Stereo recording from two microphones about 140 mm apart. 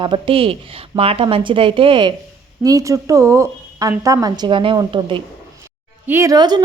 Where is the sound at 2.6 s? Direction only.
25° right (ahead or behind).